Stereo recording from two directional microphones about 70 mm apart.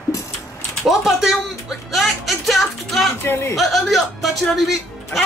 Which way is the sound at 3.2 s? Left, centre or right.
Left.